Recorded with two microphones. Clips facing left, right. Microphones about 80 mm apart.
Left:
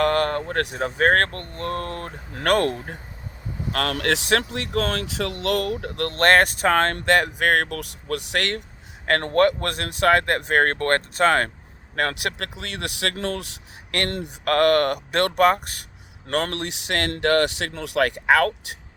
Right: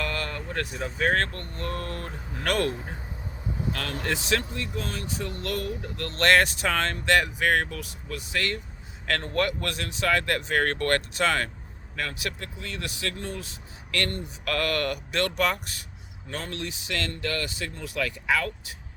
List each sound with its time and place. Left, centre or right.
0.0 s speech: left
2.3 s speech: left
3.9 s speech: left
4.5 s speech: left
9.3 s speech: left
11.9 s speech: left
14.4 s speech: left
16.3 s speech: left